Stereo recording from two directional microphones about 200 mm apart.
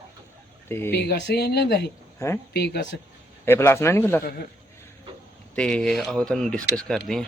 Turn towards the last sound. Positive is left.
turn(degrees=5)  # may be behind; listen again after turning